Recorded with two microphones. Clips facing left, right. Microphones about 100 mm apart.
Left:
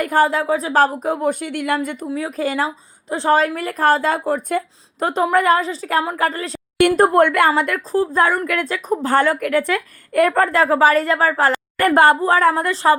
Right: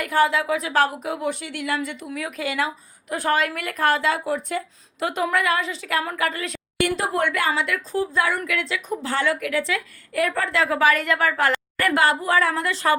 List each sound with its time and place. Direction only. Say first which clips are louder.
0.0 s a woman's voice: left 4 dB; 40° left (ahead or behind)
2.0 s a woman's voice: left 6 dB; 30° left (ahead or behind)
6.8 s a woman's voice: left 10 dB; 50° left (ahead or behind)
11.8 s a woman's voice: left 8 dB; 45° left (ahead or behind)